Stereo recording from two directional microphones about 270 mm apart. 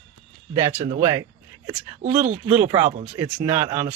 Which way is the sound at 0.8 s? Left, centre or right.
Centre.